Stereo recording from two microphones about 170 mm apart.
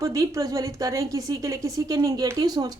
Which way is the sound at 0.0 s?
20° right (ahead or behind).